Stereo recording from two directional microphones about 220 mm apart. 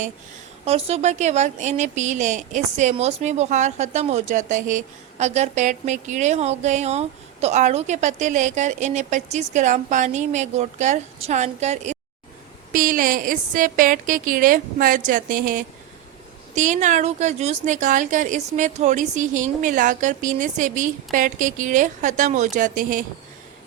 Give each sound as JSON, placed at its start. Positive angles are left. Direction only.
{"t": 0.6, "sound": "speech", "side_deg": -25}